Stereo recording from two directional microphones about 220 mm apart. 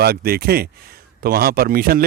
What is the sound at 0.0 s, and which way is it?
Speech, 45° right (ahead or behind).